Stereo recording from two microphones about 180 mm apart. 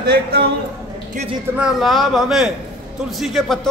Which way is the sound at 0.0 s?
60° right (ahead or behind).